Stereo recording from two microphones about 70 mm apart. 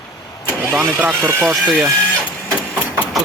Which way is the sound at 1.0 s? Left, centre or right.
Right.